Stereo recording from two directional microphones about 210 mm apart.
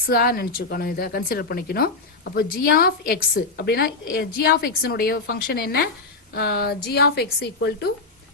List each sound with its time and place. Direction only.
0.0 s a woman's voice: 45° left (ahead or behind)